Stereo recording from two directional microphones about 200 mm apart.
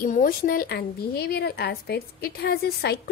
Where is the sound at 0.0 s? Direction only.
45° left (ahead or behind).